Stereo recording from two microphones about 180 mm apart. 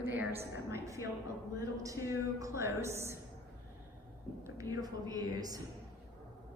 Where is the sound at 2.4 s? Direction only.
15° right (ahead or behind).